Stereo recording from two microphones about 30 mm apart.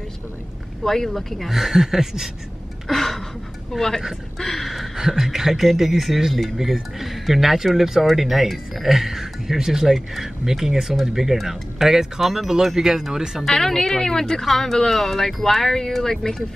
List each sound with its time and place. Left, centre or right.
0.8 s speech: centre
1.5 s speech: centre
2.9 s a sound: centre
3.7 s speech: centre
4.4 s speech: centre
4.9 s speech: centre
13.5 s speech: centre
14.4 s speech: centre